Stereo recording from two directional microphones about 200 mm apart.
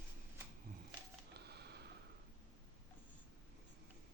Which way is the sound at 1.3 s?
55° right (ahead or behind).